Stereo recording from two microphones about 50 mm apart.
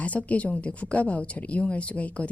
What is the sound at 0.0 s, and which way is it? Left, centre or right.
A woman's voice, left.